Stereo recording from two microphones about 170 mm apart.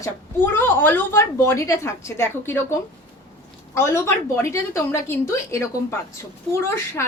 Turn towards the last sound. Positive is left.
turn(degrees=15)  # may be behind; listen again after turning